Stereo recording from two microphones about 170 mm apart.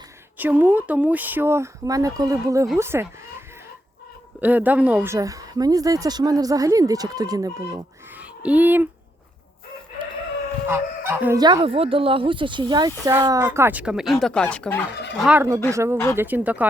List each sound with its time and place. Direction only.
0.3 s speech: 10° right (ahead or behind)
4.4 s speech: 10° right (ahead or behind)
8.1 s speech: 10° right (ahead or behind)
10.7 s fowl: 15° right (ahead or behind)
11.3 s speech: 25° right (ahead or behind); by 14.8 s 5° left (ahead or behind)
15.2 s speech: 5° right (ahead or behind)